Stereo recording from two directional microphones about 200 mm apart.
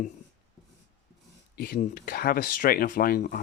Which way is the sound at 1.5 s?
45° left (ahead or behind).